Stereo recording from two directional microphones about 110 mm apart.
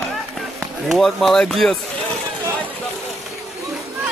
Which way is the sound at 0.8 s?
Centre (ahead or behind).